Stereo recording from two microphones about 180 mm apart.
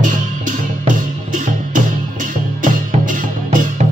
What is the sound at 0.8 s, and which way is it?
Music, 45° right (ahead or behind).